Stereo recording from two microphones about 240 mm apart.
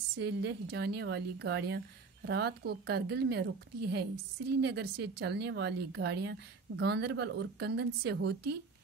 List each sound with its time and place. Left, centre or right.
0.2 s speech: right